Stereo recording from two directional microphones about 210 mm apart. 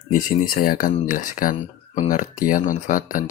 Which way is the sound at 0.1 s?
40° left (ahead or behind).